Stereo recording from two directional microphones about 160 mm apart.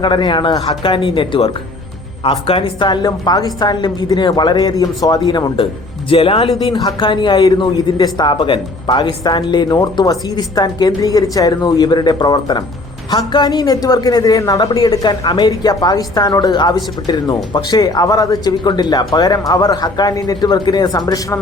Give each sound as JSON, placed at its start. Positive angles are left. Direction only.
{"t": 0.0, "sound": "a woman's voice", "side_deg": 30}